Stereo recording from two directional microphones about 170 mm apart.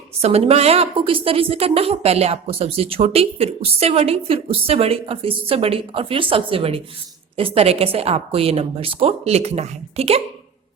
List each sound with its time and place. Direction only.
0.2 s a woman's voice: 35° right (ahead or behind)